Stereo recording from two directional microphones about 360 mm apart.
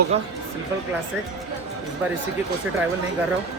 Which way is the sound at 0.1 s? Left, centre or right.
Centre.